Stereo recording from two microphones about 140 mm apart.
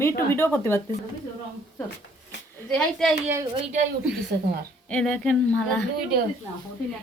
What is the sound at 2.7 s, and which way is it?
Speech, 5° left (ahead or behind).